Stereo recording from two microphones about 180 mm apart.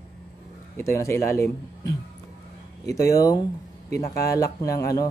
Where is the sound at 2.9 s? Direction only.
20° left (ahead or behind).